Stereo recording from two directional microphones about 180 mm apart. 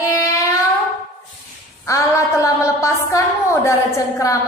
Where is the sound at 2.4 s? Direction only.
15° left (ahead or behind).